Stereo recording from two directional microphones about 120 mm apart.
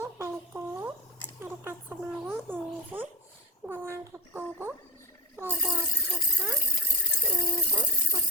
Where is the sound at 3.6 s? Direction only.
20° right (ahead or behind).